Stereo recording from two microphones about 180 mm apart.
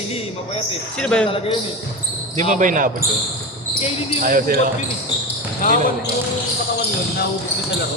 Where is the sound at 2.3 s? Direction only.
45° right (ahead or behind).